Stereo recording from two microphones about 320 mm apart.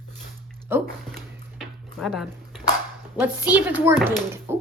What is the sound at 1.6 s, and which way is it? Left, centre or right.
Dishes, centre.